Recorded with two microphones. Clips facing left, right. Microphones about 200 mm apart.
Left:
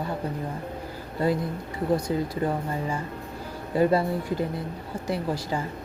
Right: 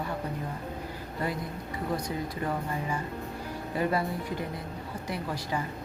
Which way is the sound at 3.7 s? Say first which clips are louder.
Left 7 dB; 30° left (ahead or behind).